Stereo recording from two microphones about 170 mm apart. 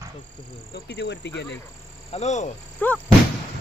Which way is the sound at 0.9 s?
90° left.